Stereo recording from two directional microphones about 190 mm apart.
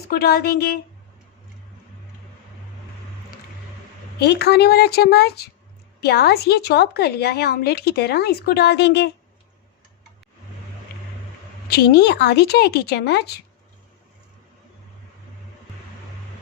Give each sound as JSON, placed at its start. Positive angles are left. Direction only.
{"t": 0.1, "sound": "a woman's voice", "side_deg": 55}
{"t": 4.2, "sound": "a woman's voice", "side_deg": 60}
{"t": 11.7, "sound": "a woman's voice", "side_deg": 55}